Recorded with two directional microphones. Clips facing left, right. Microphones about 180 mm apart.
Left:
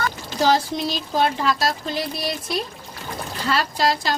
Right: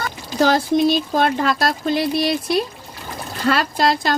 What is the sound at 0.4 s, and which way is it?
Speech, 55° right (ahead or behind).